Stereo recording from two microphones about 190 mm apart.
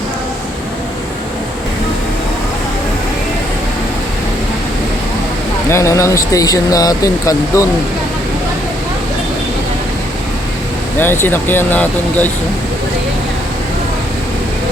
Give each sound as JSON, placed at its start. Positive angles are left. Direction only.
{"t": 5.6, "sound": "speech", "side_deg": 15}
{"t": 11.0, "sound": "speech", "side_deg": 10}